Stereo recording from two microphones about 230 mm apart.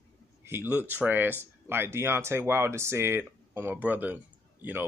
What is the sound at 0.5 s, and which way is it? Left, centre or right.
Speech, centre.